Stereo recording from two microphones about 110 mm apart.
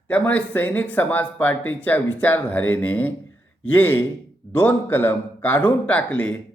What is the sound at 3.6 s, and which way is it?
Mantra, 20° left (ahead or behind).